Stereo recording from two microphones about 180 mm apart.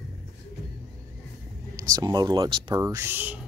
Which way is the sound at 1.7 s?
20° right (ahead or behind).